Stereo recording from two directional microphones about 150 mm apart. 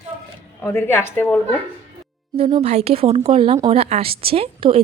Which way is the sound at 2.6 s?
45° right (ahead or behind).